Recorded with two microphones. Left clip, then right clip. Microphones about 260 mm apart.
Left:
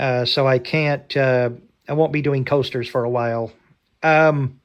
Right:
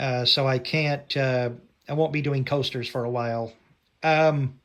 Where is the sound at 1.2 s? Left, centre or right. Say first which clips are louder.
Left 8 dB; left.